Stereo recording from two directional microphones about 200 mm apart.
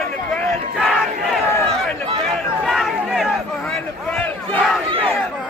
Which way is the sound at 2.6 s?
Centre (ahead or behind).